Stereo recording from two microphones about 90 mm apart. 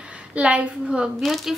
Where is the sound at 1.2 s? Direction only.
Centre (ahead or behind).